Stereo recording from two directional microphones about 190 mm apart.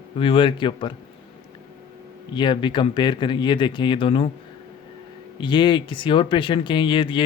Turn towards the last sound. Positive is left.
turn(degrees=25)  # may be behind; listen again after turning